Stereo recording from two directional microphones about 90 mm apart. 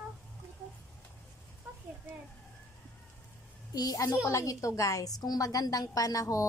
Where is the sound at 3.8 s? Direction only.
45° left (ahead or behind).